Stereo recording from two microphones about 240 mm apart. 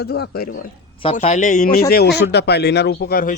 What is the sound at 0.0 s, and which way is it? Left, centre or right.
Speech, left.